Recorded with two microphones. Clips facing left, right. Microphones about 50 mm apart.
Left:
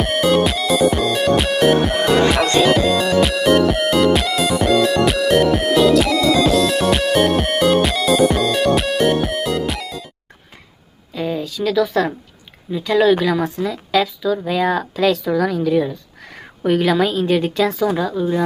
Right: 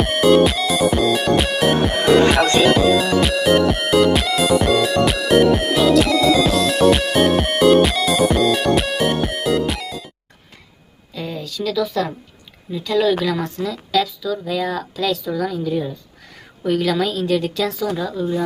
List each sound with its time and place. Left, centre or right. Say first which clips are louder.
0.0 s music: right 2 dB; centre
11.1 s a sound: left 5 dB; left
11.6 s a woman's voice: left 3 dB; left; by 13.7 s centre
13.7 s speech: right 1 dB; left
16.3 s a woman's voice: left 3 dB; left